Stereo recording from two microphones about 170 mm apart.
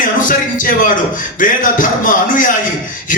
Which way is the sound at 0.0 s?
50° left (ahead or behind).